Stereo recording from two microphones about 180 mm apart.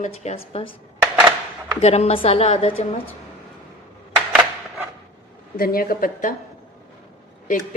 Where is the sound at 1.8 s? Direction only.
35° left (ahead or behind).